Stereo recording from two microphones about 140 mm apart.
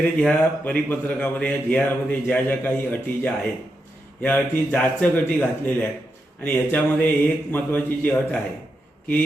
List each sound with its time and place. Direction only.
0.0 s a man's voice: 10° left (ahead or behind)